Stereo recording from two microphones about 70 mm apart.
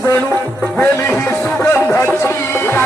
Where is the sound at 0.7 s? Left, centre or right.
Left.